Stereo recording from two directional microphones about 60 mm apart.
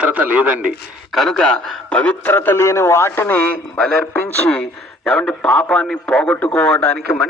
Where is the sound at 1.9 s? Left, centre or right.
Left.